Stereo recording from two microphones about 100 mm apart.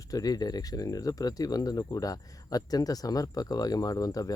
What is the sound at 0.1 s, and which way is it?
Speech, 40° left (ahead or behind).